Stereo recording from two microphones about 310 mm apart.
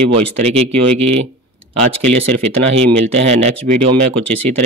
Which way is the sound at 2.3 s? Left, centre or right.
Right.